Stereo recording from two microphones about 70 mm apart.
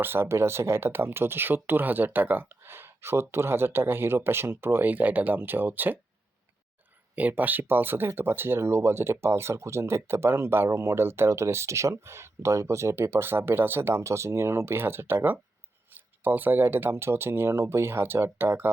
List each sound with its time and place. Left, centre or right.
0.0 s speech: right
7.2 s speech: right